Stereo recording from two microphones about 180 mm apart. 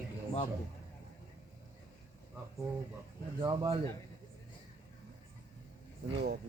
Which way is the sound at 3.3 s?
25° right (ahead or behind).